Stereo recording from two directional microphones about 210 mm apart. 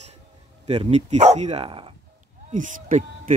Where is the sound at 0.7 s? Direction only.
30° right (ahead or behind).